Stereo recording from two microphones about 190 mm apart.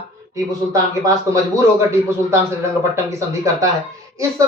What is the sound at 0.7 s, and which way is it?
Speech, 15° right (ahead or behind).